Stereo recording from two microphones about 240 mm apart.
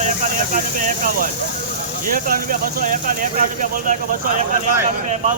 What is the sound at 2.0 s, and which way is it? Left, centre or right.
Speech, right.